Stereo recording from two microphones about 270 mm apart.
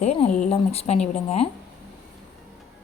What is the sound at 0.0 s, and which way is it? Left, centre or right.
Speech, left.